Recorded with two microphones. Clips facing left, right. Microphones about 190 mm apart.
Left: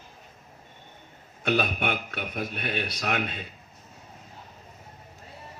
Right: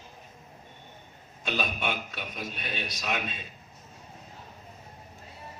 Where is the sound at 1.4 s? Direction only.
60° left (ahead or behind).